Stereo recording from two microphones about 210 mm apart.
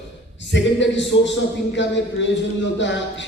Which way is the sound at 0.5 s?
60° left (ahead or behind).